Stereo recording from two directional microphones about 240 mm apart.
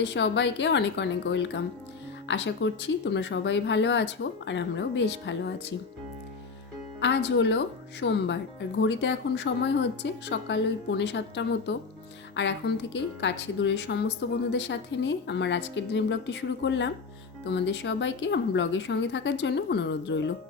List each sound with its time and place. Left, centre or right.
0.0 s speech: left
7.0 s speech: left